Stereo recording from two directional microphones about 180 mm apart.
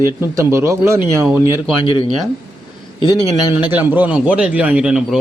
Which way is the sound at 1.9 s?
30° left (ahead or behind).